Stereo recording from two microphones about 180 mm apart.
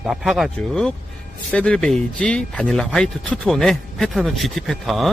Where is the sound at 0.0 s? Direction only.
Centre (ahead or behind).